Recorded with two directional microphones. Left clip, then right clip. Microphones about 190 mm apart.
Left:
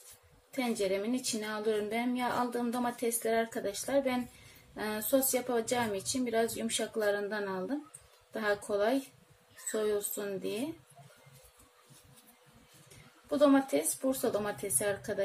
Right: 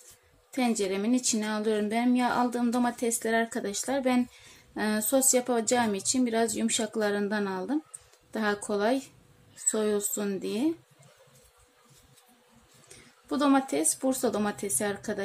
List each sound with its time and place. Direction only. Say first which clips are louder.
0.5 s a woman's voice: right 3 dB; 55° right (ahead or behind)
13.3 s a woman's voice: right 1 dB; 55° right (ahead or behind)